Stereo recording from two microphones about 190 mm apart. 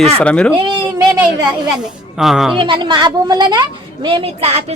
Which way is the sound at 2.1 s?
Centre (ahead or behind).